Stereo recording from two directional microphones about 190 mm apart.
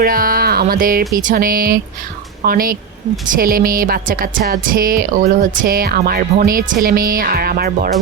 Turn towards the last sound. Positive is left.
turn(degrees=-50)  # may be behind; listen again after turning